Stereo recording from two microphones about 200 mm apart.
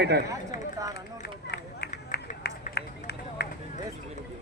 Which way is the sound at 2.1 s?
55° left (ahead or behind).